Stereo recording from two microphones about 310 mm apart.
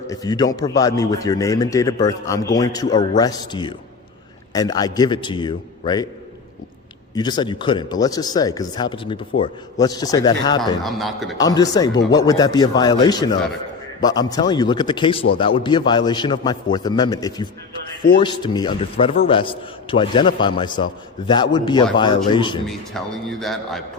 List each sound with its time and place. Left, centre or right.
0.1 s a man's voice: centre
7.2 s a man's voice: centre
10.8 s a man's voice: centre
11.3 s a man's voice: centre
22.6 s a man's voice: centre